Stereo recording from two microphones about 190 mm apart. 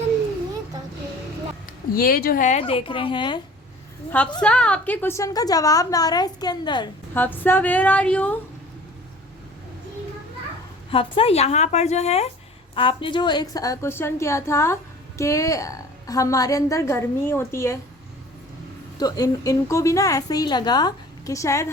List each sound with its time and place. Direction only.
1.6 s speech: 50° left (ahead or behind); by 3.4 s 25° left (ahead or behind)
4.4 s a woman's voice: 5° left (ahead or behind); by 6.9 s 25° left (ahead or behind)
7.1 s a woman's voice: 10° left (ahead or behind)
10.9 s a woman's voice: 30° left (ahead or behind); by 17.7 s 15° left (ahead or behind)
18.9 s a woman's voice: 20° left (ahead or behind)